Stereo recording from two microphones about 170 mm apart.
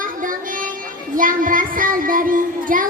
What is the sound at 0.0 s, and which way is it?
Music, 50° right (ahead or behind).